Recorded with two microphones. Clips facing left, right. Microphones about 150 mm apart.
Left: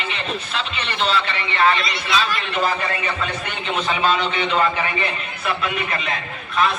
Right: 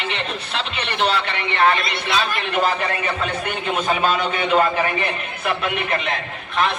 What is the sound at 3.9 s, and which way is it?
A man's voice, 45° right (ahead or behind).